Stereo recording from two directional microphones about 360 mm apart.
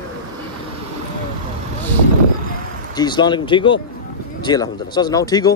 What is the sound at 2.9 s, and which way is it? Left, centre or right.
Speech, centre.